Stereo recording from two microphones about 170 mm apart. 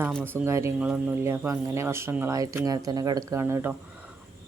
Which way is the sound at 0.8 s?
5° right (ahead or behind).